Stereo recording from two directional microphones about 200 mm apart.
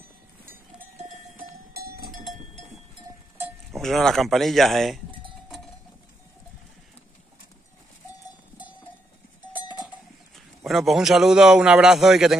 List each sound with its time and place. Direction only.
0.5 s cowbell: 45° right (ahead or behind)
2.3 s cowbell: 35° right (ahead or behind)
3.3 s speech: 5° right (ahead or behind)
10.3 s a man's voice: centre (ahead or behind)